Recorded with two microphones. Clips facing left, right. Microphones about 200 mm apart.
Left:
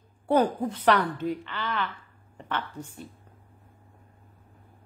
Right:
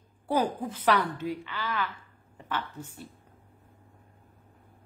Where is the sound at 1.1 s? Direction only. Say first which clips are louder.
Left 3 dB; 55° left (ahead or behind).